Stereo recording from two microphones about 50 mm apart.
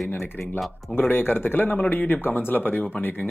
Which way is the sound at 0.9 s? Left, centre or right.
Left.